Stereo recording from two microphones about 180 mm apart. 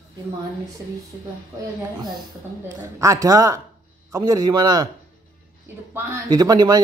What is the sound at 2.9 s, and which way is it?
Speech, 20° right (ahead or behind).